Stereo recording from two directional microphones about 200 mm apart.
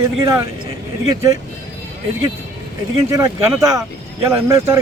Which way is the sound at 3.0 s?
15° right (ahead or behind).